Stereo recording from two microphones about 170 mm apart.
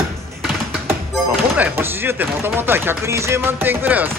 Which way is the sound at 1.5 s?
10° right (ahead or behind).